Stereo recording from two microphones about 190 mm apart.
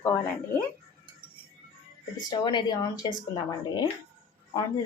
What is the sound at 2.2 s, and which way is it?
Speech, 20° left (ahead or behind).